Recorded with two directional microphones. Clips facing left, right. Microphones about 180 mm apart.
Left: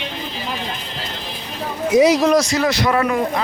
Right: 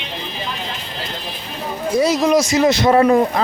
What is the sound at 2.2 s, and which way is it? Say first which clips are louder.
Speech: even; centre (ahead or behind).